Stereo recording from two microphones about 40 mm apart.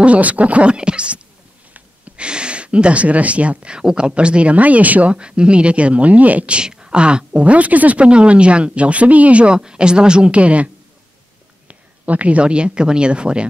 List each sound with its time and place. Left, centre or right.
0.0 s speech: right
5.1 s speech: right
6.5 s speech: right
9.6 s speech: right